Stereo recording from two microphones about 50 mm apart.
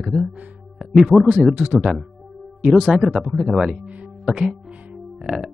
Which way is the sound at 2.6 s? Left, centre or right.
Centre.